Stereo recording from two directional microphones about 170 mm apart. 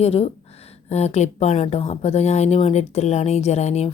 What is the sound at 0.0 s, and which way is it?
Speech, 35° left (ahead or behind).